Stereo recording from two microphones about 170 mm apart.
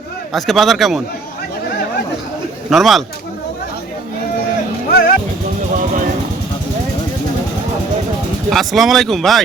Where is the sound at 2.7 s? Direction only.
Centre (ahead or behind).